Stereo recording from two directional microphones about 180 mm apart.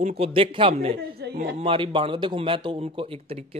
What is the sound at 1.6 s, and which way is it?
A man's voice, 30° right (ahead or behind).